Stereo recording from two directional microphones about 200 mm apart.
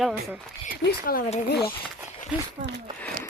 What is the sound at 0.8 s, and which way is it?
Speech, 50° left (ahead or behind).